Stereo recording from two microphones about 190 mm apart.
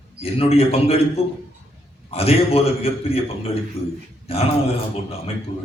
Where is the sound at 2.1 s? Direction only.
30° left (ahead or behind).